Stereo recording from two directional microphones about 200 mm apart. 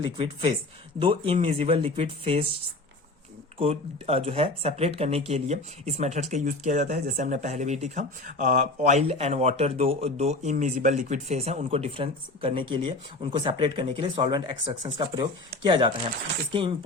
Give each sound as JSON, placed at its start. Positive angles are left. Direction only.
{"t": 0.0, "sound": "speech", "side_deg": -25}
{"t": 3.6, "sound": "speech", "side_deg": -30}